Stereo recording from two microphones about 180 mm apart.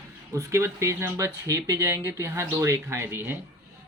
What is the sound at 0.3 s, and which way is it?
Speech, 15° right (ahead or behind).